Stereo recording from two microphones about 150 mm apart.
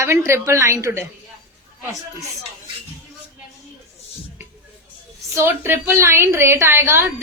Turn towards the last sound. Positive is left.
turn(degrees=-15)  # may be behind; listen again after turning